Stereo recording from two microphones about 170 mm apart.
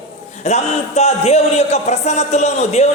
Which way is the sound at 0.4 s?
40° left (ahead or behind).